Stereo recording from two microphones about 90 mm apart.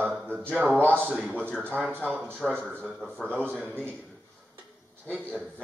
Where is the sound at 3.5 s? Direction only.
15° left (ahead or behind).